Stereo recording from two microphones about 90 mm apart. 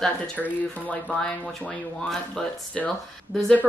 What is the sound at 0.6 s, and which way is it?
A woman's voice, 15° left (ahead or behind).